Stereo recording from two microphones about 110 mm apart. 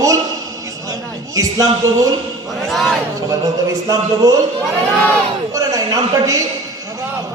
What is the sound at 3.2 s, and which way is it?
A man's voice, 30° right (ahead or behind).